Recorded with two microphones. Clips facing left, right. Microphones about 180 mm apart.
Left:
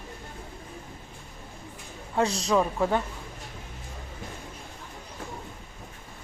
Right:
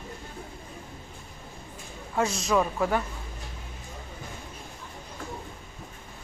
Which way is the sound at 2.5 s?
20° left (ahead or behind).